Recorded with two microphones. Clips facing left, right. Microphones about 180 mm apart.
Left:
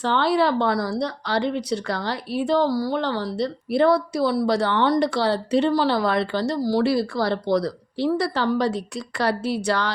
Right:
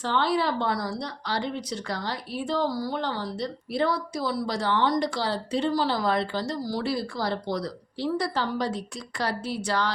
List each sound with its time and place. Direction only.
0.0 s speech: 70° left (ahead or behind)